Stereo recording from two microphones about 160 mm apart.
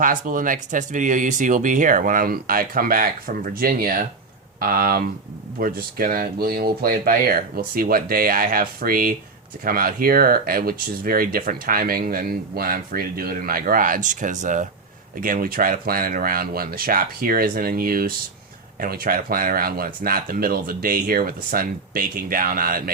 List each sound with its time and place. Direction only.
0.0 s speech: 55° right (ahead or behind)